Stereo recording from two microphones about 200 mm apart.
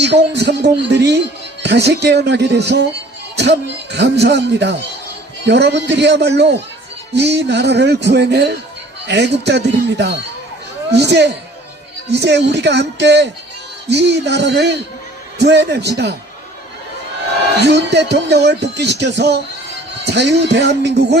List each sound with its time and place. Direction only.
0.0 s speech: 60° right (ahead or behind)
17.6 s speech: 60° right (ahead or behind)